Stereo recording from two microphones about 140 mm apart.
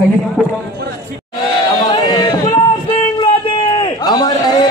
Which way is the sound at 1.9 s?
25° left (ahead or behind).